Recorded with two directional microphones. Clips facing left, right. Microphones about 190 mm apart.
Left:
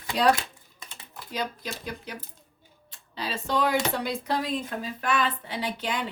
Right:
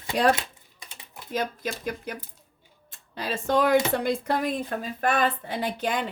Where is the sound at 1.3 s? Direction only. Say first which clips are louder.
Right 4 dB; 50° right (ahead or behind).